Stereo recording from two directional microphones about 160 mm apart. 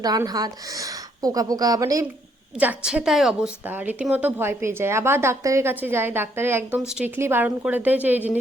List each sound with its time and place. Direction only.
0.0 s a woman's voice: 25° right (ahead or behind)
2.6 s a woman's voice: 5° right (ahead or behind)